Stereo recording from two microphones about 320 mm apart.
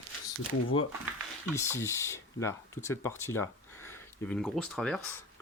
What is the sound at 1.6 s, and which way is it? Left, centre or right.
Speech, centre.